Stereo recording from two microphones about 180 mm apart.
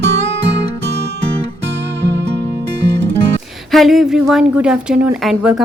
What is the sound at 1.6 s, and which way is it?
Music, 75° right (ahead or behind).